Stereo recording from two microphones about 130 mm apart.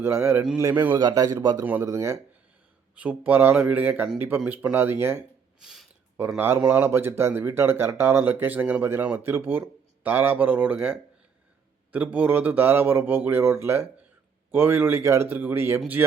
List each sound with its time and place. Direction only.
0.0 s speech: 20° right (ahead or behind)
0.9 s a man's voice: 30° right (ahead or behind)
1.6 s speech: 20° right (ahead or behind)
2.9 s speech: 10° right (ahead or behind)
5.5 s a sound: centre (ahead or behind)
6.6 s speech: 15° right (ahead or behind)